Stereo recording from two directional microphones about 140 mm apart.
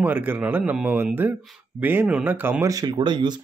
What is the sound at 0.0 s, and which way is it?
Speech, 15° right (ahead or behind).